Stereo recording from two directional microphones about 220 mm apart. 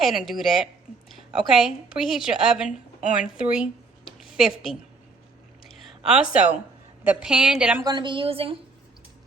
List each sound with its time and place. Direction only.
0.0 s a woman's voice: centre (ahead or behind)
5.8 s a woman's voice: 5° right (ahead or behind)
7.9 s a woman's voice: 20° right (ahead or behind)